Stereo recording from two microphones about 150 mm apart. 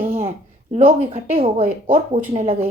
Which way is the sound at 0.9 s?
45° right (ahead or behind).